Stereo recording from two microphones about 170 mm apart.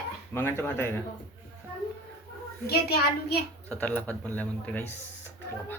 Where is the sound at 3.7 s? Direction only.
10° left (ahead or behind).